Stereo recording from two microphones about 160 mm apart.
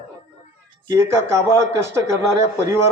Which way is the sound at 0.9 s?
15° right (ahead or behind).